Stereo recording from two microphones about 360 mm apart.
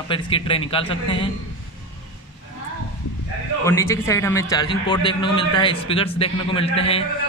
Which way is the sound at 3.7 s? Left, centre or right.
Centre.